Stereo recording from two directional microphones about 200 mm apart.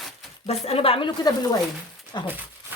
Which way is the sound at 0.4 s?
30° left (ahead or behind).